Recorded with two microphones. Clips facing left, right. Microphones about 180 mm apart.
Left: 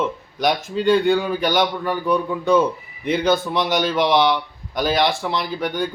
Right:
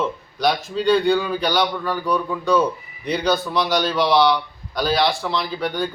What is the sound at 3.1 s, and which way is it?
Speech, 50° left (ahead or behind).